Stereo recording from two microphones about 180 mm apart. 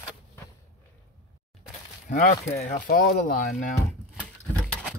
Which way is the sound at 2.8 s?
55° left (ahead or behind).